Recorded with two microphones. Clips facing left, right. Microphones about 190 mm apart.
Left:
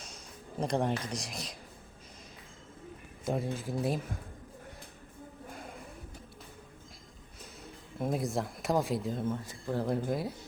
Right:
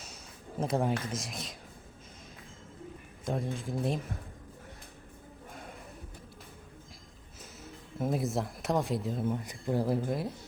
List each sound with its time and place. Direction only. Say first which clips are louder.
0.6 s speech: right 1 dB; 5° right (ahead or behind)
3.2 s speech: left 1 dB; 5° left (ahead or behind)
5.5 s a sound: even; centre (ahead or behind)
7.9 s speech: right 1 dB; centre (ahead or behind)
9.3 s speech: right 3 dB; 15° right (ahead or behind)
9.8 s speech: right 1 dB; centre (ahead or behind)